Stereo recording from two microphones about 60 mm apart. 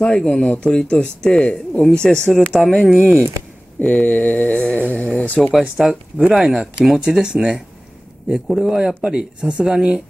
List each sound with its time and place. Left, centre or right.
0.0 s speech: centre
3.8 s mantra: left
5.6 s speech: centre